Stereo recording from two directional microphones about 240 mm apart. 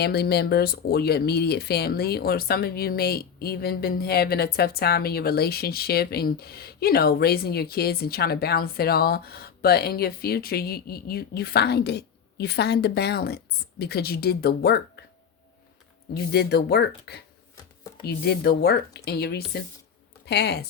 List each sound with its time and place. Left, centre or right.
0.0 s speech: left
16.1 s speech: left